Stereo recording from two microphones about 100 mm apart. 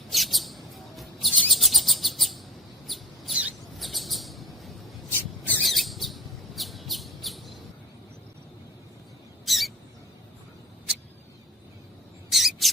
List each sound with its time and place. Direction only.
0.1 s bird: centre (ahead or behind)
2.8 s mouse: centre (ahead or behind)
3.8 s a sound: centre (ahead or behind)
5.1 s mouse: 15° left (ahead or behind)
5.6 s bird: centre (ahead or behind)
9.5 s mouse: centre (ahead or behind)
12.3 s mouse: centre (ahead or behind)